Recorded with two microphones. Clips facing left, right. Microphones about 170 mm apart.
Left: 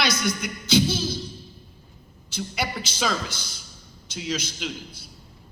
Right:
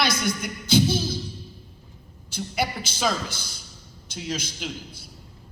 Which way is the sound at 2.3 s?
50° right (ahead or behind).